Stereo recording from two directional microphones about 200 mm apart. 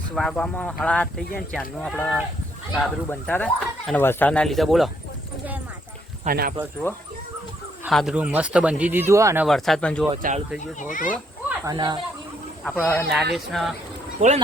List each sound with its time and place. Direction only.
0.2 s speech: 5° left (ahead or behind)
6.2 s speech: 50° right (ahead or behind)
7.9 s speech: centre (ahead or behind)
9.5 s speech: centre (ahead or behind)
10.8 s speech: 40° left (ahead or behind)
11.4 s a sound: 20° right (ahead or behind)
12.9 s speech: centre (ahead or behind)
14.2 s speech: 35° right (ahead or behind)